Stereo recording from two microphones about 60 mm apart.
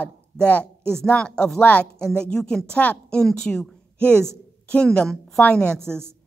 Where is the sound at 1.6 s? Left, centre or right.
Left.